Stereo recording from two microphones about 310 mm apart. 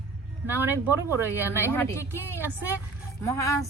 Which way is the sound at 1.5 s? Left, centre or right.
Centre.